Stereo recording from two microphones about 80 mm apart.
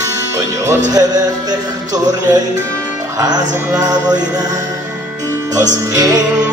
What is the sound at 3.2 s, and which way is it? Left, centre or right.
Music, right.